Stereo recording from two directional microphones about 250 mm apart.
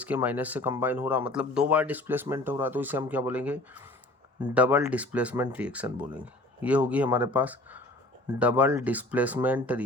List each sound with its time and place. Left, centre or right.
0.0 s speech: centre